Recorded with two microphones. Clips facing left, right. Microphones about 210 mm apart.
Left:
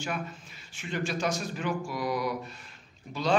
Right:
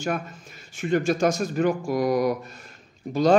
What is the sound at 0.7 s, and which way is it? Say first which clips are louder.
A man's voice: right 10 dB; 45° right (ahead or behind).